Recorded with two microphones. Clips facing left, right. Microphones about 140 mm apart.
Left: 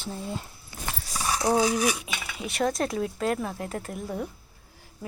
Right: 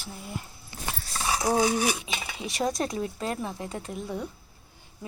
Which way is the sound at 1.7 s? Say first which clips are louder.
Left 1 dB; 30° right (ahead or behind).